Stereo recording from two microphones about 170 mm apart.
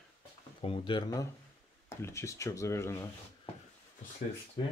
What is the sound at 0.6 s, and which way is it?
Speech, 30° left (ahead or behind).